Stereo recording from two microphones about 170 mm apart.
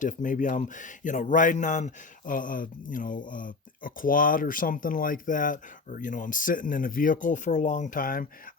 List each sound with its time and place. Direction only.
0.0 s speech: 50° left (ahead or behind)